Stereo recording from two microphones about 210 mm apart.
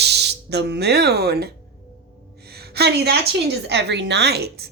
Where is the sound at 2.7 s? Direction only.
50° right (ahead or behind).